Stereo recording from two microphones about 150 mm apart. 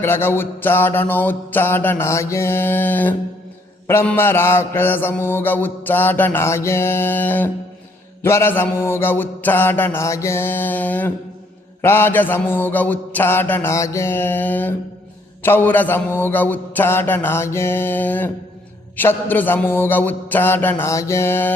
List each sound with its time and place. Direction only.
0.0 s mantra: 15° left (ahead or behind)